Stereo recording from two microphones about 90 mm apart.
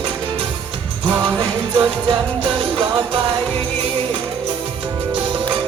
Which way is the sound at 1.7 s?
65° right (ahead or behind).